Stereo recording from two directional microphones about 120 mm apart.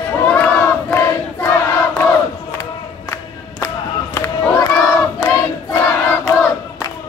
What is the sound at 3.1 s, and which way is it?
Battle cry, 20° left (ahead or behind).